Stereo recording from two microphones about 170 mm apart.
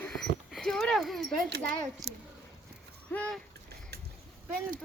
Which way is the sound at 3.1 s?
10° left (ahead or behind).